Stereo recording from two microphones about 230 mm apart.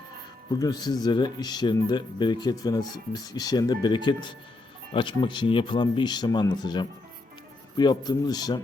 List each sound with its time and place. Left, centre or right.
0.6 s speech: centre